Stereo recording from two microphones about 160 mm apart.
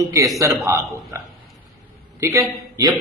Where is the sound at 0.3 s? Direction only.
20° right (ahead or behind).